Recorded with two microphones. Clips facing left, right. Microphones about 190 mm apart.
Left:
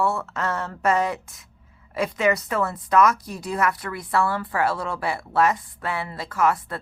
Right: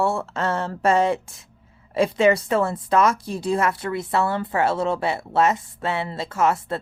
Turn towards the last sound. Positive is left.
turn(degrees=-25)  # may be behind; listen again after turning